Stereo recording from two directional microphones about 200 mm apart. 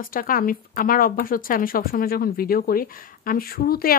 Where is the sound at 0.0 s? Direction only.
45° left (ahead or behind).